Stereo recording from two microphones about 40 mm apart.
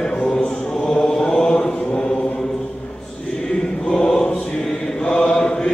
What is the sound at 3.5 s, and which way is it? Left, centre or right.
Choir, centre.